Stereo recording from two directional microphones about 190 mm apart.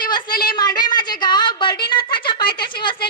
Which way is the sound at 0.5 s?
20° left (ahead or behind).